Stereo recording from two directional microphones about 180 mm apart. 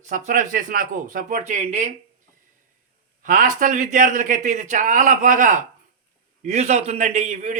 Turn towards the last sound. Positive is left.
turn(degrees=-40)  # may be behind; listen again after turning